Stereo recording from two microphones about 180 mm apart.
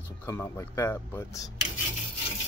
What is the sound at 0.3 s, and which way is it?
Speech, 15° left (ahead or behind).